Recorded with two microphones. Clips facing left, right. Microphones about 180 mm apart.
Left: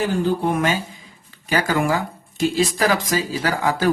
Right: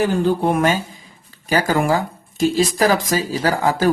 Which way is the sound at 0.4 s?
45° right (ahead or behind).